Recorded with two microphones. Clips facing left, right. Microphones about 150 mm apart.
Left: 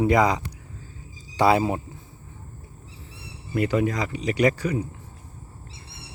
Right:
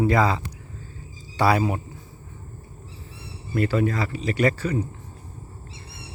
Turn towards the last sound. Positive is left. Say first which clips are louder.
# left 1 dB
turn(degrees=10)  # may be behind; listen again after turning